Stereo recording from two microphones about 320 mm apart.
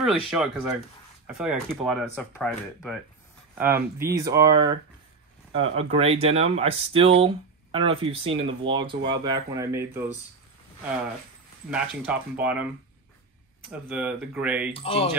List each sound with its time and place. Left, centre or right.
0.0 s speech: centre
12.1 s speech: centre
13.7 s speech: centre
14.7 s speech: centre